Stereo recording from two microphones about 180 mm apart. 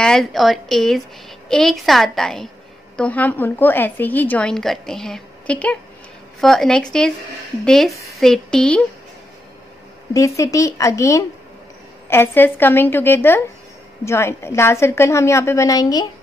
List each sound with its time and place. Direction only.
0.0 s a woman's voice: centre (ahead or behind)
10.1 s a woman's voice: 15° left (ahead or behind)